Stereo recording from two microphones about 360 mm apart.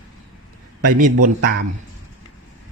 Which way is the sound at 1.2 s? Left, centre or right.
Right.